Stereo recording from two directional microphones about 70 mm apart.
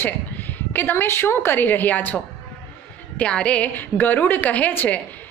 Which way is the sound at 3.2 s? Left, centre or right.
Centre.